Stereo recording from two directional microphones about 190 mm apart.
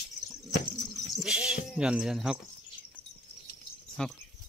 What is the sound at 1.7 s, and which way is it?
Speech, 5° right (ahead or behind).